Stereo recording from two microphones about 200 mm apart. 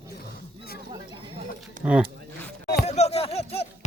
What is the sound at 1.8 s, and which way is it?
Speech, 5° right (ahead or behind).